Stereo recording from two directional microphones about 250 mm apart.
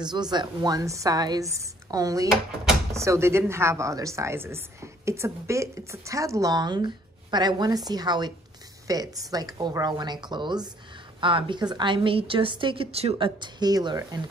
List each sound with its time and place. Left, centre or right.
0.0 s a woman's voice: centre